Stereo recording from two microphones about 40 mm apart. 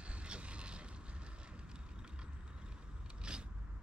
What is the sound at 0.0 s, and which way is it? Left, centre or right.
Boat, right.